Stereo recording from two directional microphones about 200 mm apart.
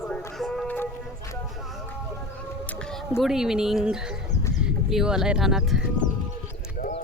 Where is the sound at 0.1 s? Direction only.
Centre (ahead or behind).